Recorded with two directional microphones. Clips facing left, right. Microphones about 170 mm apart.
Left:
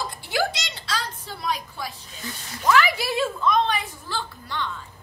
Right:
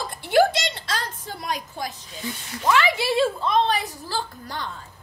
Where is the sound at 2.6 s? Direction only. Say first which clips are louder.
Even; 25° right (ahead or behind).